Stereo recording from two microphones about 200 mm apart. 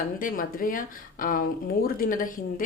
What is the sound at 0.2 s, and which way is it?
Speech, 45° left (ahead or behind).